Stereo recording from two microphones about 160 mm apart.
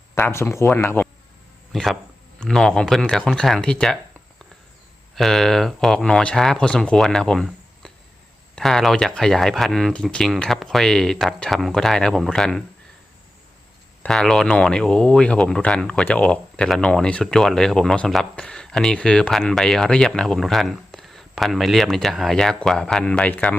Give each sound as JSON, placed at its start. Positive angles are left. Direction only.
{"t": 0.1, "sound": "speech", "side_deg": 15}
{"t": 1.7, "sound": "a sound", "side_deg": 0}
{"t": 2.4, "sound": "speech", "side_deg": 5}
{"t": 5.1, "sound": "speech", "side_deg": 0}
{"t": 14.0, "sound": "speech", "side_deg": 5}